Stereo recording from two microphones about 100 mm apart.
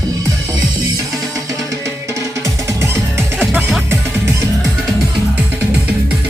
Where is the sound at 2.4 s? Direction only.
30° right (ahead or behind).